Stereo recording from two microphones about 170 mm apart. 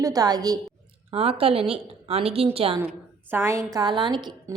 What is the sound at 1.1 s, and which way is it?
A woman's voice, 35° right (ahead or behind).